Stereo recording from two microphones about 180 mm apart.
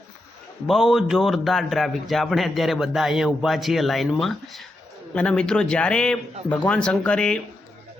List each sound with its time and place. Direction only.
0.7 s a man's voice: centre (ahead or behind)